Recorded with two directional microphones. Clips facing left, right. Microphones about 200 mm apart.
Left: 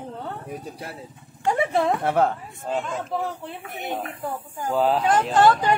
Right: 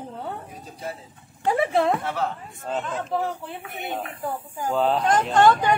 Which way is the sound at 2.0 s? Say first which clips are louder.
Left 6 dB; 55° left (ahead or behind).